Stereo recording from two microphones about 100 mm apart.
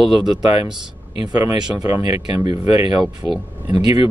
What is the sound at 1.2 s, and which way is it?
Speech, 45° right (ahead or behind).